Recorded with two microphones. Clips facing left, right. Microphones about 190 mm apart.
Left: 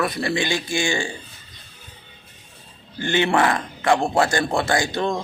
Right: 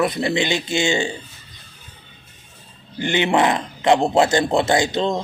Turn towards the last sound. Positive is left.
turn(degrees=-20)  # may be behind; listen again after turning